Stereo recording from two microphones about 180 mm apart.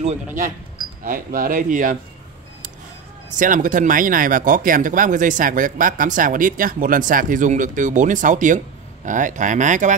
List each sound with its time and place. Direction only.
1.0 s speech: 50° right (ahead or behind)
3.3 s speech: 45° right (ahead or behind)